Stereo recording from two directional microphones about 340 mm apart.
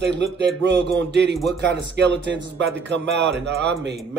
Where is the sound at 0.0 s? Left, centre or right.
Right.